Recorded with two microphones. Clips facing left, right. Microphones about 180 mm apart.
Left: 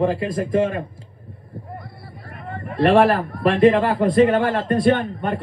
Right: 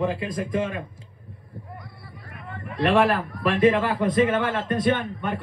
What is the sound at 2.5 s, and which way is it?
A man's voice, 50° left (ahead or behind).